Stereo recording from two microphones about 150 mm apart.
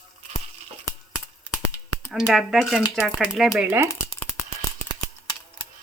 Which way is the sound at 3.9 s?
20° left (ahead or behind).